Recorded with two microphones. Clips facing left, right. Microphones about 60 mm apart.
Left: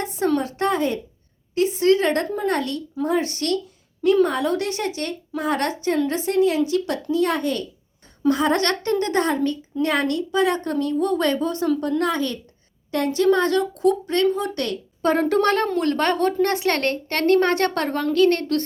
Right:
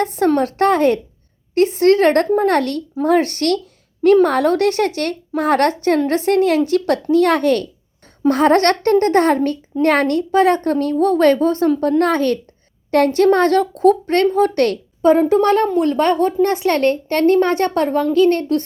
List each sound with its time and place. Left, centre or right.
0.0 s a sound: right
0.3 s speech: right
8.3 s a woman's voice: right
15.2 s a woman's voice: centre
16.6 s speech: left
18.3 s a woman's voice: right